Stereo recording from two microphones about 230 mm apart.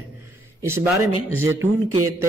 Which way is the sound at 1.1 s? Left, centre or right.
Right.